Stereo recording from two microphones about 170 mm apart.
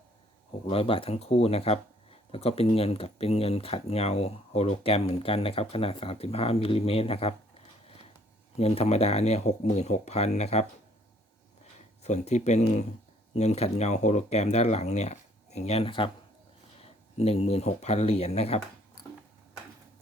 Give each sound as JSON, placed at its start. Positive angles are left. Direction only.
{"t": 0.7, "sound": "speech", "side_deg": 35}
{"t": 8.5, "sound": "speech", "side_deg": 35}
{"t": 12.0, "sound": "speech", "side_deg": 40}